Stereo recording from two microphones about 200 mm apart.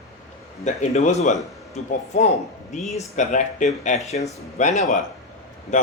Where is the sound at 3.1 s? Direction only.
35° left (ahead or behind).